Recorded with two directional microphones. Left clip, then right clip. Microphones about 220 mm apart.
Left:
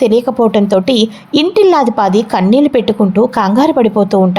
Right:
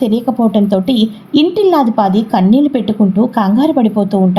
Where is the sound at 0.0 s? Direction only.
60° left (ahead or behind).